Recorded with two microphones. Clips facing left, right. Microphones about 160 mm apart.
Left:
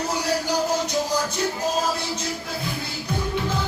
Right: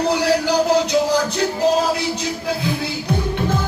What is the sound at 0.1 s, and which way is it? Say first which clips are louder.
Music: right 6 dB; 70° right (ahead or behind).